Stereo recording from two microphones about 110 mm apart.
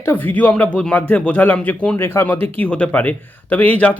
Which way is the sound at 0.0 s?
20° left (ahead or behind).